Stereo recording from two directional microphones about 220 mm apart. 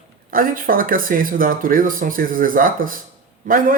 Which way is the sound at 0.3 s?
40° right (ahead or behind).